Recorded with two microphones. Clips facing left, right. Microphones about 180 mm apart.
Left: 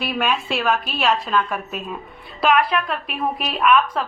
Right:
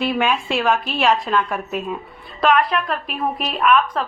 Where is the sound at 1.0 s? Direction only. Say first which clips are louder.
Right 2 dB; 5° right (ahead or behind).